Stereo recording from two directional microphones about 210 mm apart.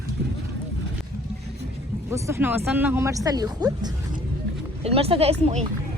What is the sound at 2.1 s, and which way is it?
Speech, 10° right (ahead or behind).